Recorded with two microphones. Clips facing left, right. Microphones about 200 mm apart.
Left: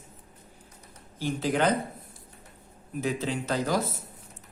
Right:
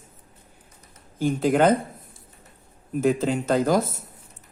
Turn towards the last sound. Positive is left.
turn(degrees=-50)  # may be behind; listen again after turning